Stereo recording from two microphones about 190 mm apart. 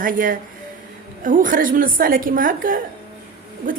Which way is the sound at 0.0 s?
45° right (ahead or behind).